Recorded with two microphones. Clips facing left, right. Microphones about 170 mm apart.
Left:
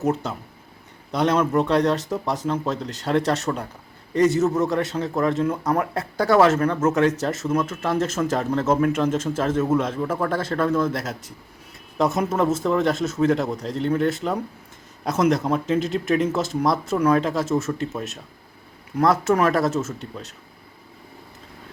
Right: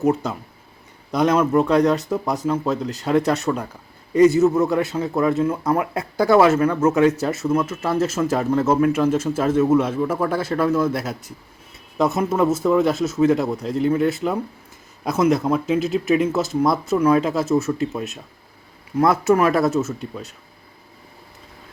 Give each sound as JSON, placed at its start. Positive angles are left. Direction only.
{"t": 0.0, "sound": "a man's voice", "side_deg": -10}